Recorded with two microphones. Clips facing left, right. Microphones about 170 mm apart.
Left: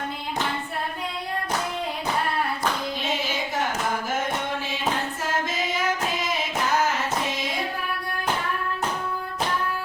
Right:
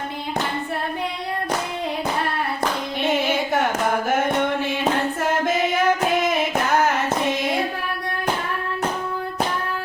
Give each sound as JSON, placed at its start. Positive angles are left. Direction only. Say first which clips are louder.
{"t": 3.0, "sound": "singing", "louder": "right 7 dB", "side_deg": -60}
{"t": 4.1, "sound": "music", "louder": "right 7 dB", "side_deg": -55}
{"t": 5.5, "sound": "singing", "louder": "right 7 dB", "side_deg": -60}